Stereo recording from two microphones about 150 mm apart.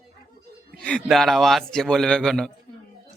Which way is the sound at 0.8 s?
5° left (ahead or behind).